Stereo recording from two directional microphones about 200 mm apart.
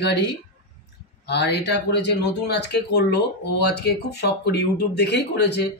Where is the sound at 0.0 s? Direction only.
55° left (ahead or behind).